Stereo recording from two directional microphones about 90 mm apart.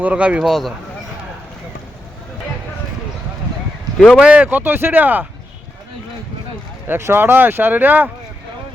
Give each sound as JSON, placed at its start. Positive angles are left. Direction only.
{"t": 0.0, "sound": "speech", "side_deg": -15}
{"t": 4.2, "sound": "speech", "side_deg": -15}
{"t": 6.8, "sound": "speech", "side_deg": -25}